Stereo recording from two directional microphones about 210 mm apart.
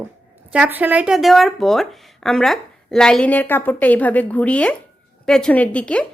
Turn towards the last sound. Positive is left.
turn(degrees=5)  # may be behind; listen again after turning